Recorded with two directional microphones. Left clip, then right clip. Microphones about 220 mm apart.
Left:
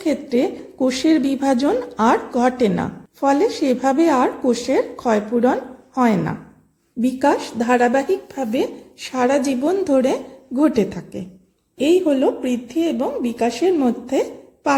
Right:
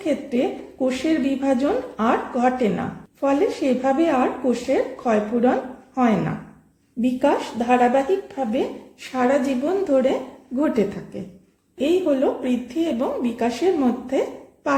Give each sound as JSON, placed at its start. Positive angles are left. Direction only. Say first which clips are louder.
{"t": 0.0, "sound": "speech", "louder": "left 3 dB", "side_deg": 25}